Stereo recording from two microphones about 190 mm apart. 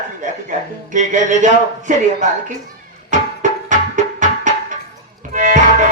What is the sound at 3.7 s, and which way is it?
Music, 40° right (ahead or behind).